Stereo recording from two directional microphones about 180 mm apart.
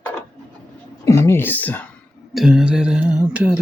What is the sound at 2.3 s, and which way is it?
Speech, 5° right (ahead or behind).